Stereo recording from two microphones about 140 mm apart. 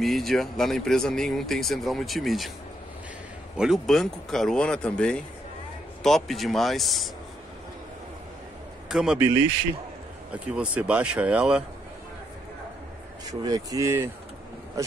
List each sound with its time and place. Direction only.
0.0 s speech: centre (ahead or behind)
3.5 s speech: 5° right (ahead or behind)
8.8 s a man's voice: 5° right (ahead or behind)
10.3 s speech: 10° right (ahead or behind)
13.3 s speech: 25° right (ahead or behind)